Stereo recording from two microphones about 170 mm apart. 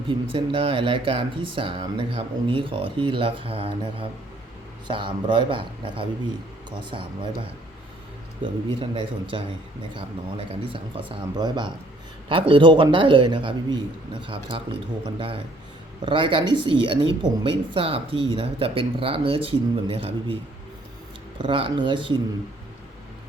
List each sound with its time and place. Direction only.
0.1 s a man's voice: 30° right (ahead or behind)
8.4 s a man's voice: 30° right (ahead or behind)
21.3 s a man's voice: 30° right (ahead or behind)